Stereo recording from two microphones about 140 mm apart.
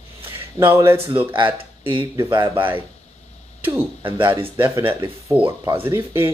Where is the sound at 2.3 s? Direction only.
35° right (ahead or behind).